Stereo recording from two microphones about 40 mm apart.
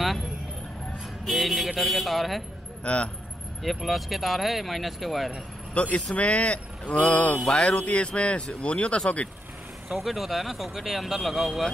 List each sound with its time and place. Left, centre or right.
1.2 s speech: centre
2.8 s speech: left
3.6 s speech: centre
5.8 s speech: left
7.0 s speech: left
7.4 s speech: left
9.8 s speech: centre